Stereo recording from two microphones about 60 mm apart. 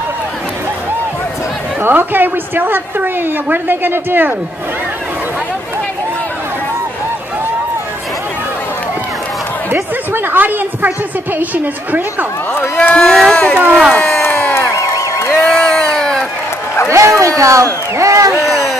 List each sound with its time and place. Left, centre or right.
1.8 s a woman's voice: right
9.7 s a woman's voice: right
12.7 s speech: left
13.0 s speech: centre
13.9 s crowd: left
14.8 s a sound: left
15.5 s crowd: centre
16.9 s speech: right
18.5 s a sound: centre